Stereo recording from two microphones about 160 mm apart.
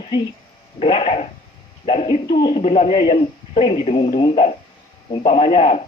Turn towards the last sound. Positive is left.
turn(degrees=45)  # may be behind; listen again after turning